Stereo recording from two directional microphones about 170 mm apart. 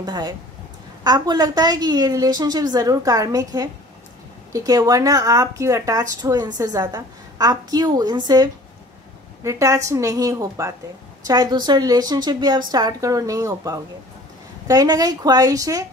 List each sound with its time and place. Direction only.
0.0 s speech: 25° right (ahead or behind)